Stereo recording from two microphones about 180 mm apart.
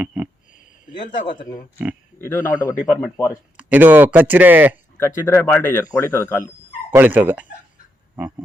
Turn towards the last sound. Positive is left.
turn(degrees=-10)  # may be behind; listen again after turning